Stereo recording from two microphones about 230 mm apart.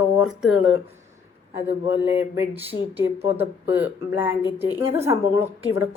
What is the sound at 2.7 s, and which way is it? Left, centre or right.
Speech, left.